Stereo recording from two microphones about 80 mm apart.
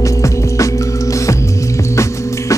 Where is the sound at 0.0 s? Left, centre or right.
Left.